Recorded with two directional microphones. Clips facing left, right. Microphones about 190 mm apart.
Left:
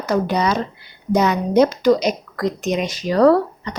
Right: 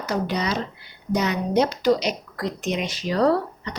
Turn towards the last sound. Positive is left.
turn(degrees=50)  # may be behind; listen again after turning